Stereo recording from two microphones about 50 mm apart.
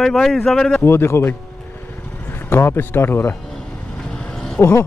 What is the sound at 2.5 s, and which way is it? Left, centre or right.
Speech, left.